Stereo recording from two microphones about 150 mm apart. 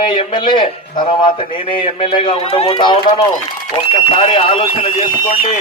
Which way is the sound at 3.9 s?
40° left (ahead or behind).